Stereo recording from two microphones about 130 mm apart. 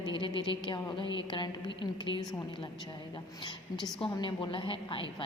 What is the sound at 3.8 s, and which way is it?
A woman's voice, 35° left (ahead or behind).